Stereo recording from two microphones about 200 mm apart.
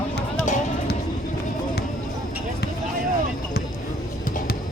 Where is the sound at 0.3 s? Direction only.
35° left (ahead or behind).